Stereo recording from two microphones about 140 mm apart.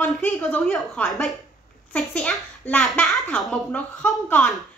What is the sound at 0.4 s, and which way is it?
A woman's voice, 5° left (ahead or behind).